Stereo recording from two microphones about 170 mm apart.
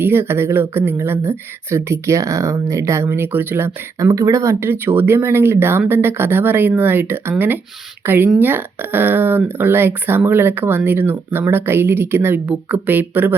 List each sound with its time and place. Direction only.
0.0 s speech: 15° right (ahead or behind)